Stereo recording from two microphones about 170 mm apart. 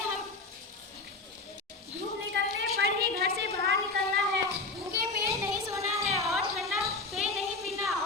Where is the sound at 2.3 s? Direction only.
70° right (ahead or behind).